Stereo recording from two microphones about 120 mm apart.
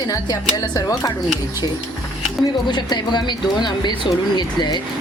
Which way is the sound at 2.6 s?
35° left (ahead or behind).